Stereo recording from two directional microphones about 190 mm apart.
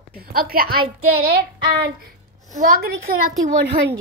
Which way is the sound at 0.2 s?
50° right (ahead or behind).